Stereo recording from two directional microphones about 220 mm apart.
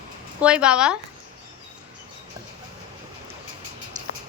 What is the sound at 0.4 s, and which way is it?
Speech, 5° right (ahead or behind).